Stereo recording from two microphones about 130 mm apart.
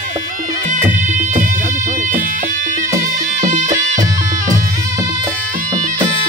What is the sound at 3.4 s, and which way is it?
Music, 70° right (ahead or behind).